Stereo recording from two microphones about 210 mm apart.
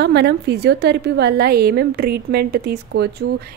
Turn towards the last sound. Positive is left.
turn(degrees=-50)  # may be behind; listen again after turning